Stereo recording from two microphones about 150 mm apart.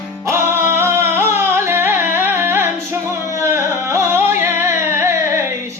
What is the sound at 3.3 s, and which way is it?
Carnatic music, 20° right (ahead or behind).